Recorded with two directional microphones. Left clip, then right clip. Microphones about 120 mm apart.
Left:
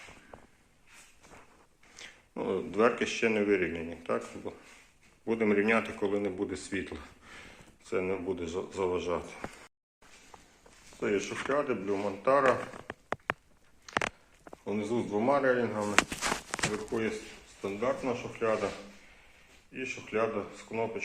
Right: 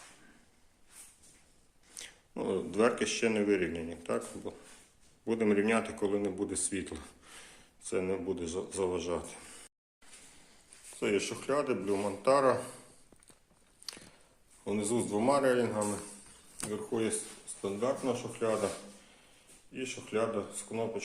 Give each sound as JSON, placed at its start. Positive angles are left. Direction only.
{"t": 2.0, "sound": "speech", "side_deg": -25}
{"t": 11.0, "sound": "speech", "side_deg": -25}
{"t": 13.9, "sound": "a sound", "side_deg": -25}
{"t": 14.6, "sound": "speech", "side_deg": -25}
{"t": 19.7, "sound": "speech", "side_deg": -40}